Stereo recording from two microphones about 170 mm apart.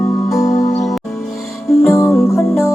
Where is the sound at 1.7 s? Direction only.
15° left (ahead or behind).